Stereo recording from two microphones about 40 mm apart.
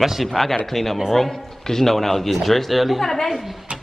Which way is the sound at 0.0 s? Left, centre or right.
Centre.